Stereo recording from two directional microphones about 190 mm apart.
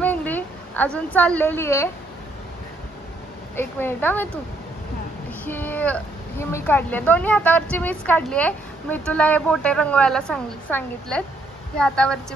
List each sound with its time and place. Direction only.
0.0 s a sound: 10° left (ahead or behind)
3.5 s a woman's voice: 10° left (ahead or behind)
5.4 s a woman's voice: 10° left (ahead or behind)